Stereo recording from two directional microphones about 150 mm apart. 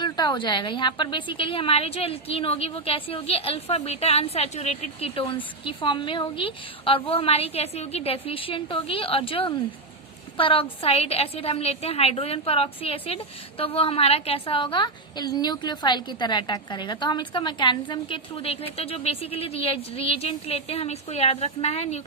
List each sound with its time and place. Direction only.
0.0 s a woman's voice: 30° left (ahead or behind); by 22.0 s 45° left (ahead or behind)